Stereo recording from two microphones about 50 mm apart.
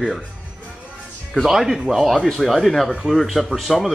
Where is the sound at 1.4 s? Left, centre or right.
Centre.